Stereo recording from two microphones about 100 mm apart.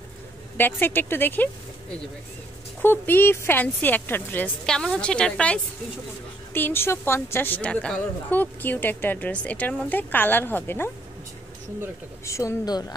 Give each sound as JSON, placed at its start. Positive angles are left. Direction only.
{"t": 0.6, "sound": "a woman's voice", "side_deg": 20}
{"t": 2.8, "sound": "a woman's voice", "side_deg": 20}
{"t": 6.5, "sound": "a woman's voice", "side_deg": 20}
{"t": 12.3, "sound": "a woman's voice", "side_deg": 30}